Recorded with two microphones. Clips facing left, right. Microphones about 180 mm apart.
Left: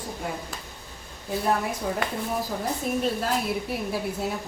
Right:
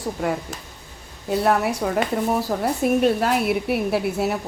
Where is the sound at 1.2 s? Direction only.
75° right (ahead or behind).